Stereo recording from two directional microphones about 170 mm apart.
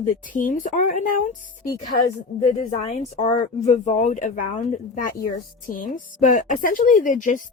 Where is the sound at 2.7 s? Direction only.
40° left (ahead or behind).